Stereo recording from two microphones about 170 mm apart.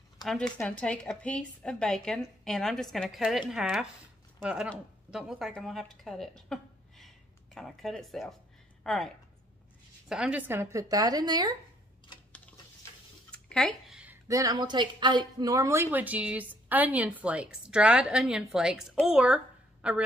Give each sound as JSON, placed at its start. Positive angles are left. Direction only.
{"t": 0.2, "sound": "a woman's voice", "side_deg": 5}
{"t": 13.3, "sound": "a sound", "side_deg": 5}
{"t": 14.2, "sound": "speech", "side_deg": -20}